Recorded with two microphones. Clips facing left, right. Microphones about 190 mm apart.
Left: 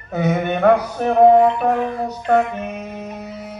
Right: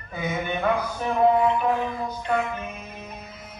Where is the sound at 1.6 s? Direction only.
70° left (ahead or behind).